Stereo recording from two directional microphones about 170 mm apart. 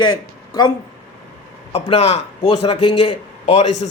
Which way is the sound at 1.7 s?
35° left (ahead or behind).